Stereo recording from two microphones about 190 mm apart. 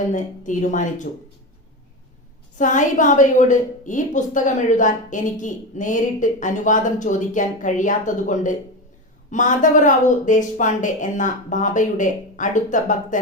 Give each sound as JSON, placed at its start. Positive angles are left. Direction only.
{"t": 0.1, "sound": "a woman's voice", "side_deg": 40}
{"t": 2.6, "sound": "a woman's voice", "side_deg": 40}